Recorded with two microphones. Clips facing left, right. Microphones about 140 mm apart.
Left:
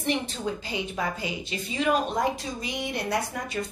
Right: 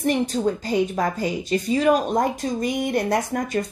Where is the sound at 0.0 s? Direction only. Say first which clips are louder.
Right 7 dB; 40° right (ahead or behind).